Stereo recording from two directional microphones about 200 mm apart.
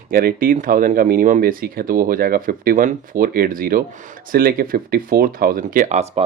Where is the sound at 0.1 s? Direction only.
45° right (ahead or behind).